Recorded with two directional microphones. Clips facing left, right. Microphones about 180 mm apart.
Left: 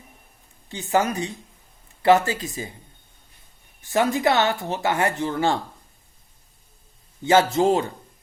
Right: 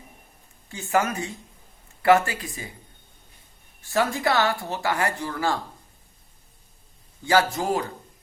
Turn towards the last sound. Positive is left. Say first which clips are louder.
# left 4 dB
turn(degrees=25)  # may be behind; listen again after turning